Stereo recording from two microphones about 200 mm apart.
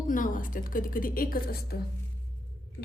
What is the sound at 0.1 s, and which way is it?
A woman's voice, 40° left (ahead or behind).